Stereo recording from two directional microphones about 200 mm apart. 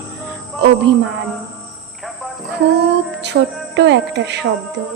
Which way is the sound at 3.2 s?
60° right (ahead or behind).